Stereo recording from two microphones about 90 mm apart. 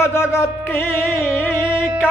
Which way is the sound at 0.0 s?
30° left (ahead or behind).